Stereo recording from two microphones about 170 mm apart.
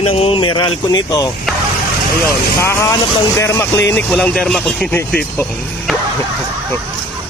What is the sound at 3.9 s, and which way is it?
Speech, 5° left (ahead or behind).